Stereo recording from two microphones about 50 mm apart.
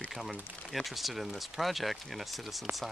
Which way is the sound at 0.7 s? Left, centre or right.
Centre.